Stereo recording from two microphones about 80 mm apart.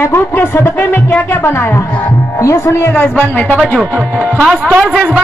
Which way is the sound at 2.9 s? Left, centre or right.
Left.